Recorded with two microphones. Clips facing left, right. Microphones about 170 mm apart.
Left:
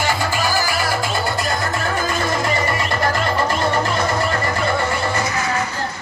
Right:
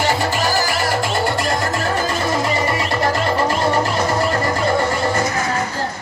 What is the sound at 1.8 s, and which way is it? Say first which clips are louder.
Music: right 1 dB; 35° right (ahead or behind).